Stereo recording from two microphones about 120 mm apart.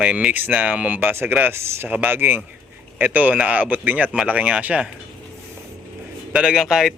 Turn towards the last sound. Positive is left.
turn(degrees=-5)  # may be behind; listen again after turning